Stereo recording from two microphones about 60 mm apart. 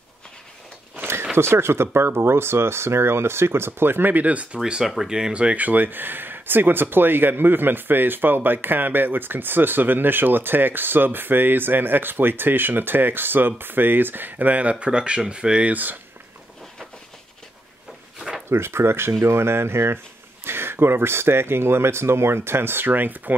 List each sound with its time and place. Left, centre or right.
0.9 s a sound: right
1.3 s speech: right
4.6 s speech: centre
5.3 s speech: right
18.5 s speech: right